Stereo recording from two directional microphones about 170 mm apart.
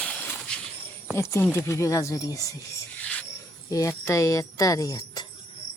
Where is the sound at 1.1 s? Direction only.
15° left (ahead or behind).